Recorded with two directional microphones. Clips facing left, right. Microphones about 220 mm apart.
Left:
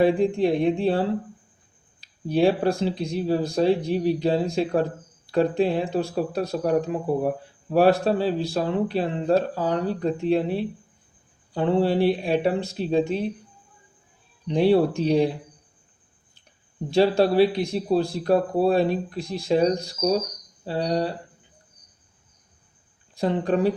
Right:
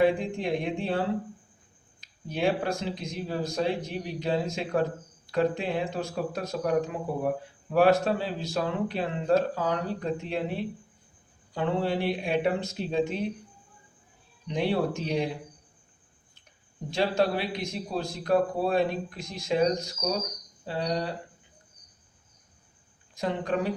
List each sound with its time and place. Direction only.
0.0 s speech: 35° left (ahead or behind)
2.0 s speech: 35° left (ahead or behind)
14.4 s speech: 35° left (ahead or behind)
16.9 s speech: 35° left (ahead or behind)
23.1 s speech: 35° left (ahead or behind)